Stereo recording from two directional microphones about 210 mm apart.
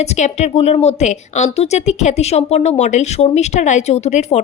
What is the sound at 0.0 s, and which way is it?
Speech, 30° left (ahead or behind).